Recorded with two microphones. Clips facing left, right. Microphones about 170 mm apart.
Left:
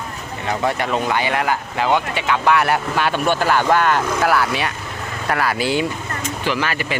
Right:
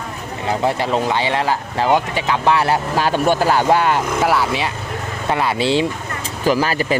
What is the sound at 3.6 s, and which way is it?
Speech, 15° right (ahead or behind).